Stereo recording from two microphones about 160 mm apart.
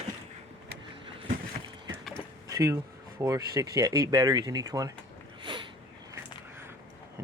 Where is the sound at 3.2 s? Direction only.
20° right (ahead or behind).